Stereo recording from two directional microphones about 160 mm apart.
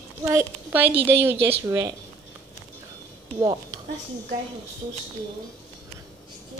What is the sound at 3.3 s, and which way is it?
Speech, 25° right (ahead or behind).